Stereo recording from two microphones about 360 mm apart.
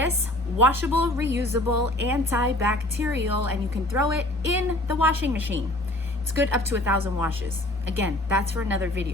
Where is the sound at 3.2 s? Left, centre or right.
Right.